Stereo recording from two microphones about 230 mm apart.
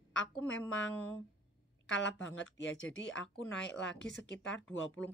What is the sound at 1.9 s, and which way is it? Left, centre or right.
Speech, left.